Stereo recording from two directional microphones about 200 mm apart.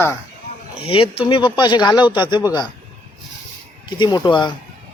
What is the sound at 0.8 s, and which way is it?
Speech, 25° left (ahead or behind).